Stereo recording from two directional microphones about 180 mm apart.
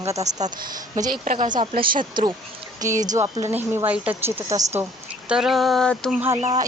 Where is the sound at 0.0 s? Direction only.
15° right (ahead or behind).